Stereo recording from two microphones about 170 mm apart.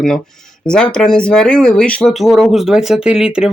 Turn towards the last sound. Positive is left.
turn(degrees=-5)  # may be behind; listen again after turning